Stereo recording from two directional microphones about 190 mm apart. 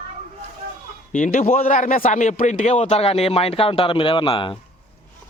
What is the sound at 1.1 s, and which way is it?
A man's voice, 40° left (ahead or behind).